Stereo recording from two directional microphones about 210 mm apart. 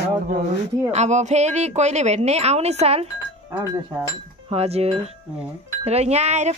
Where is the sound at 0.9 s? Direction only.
35° right (ahead or behind).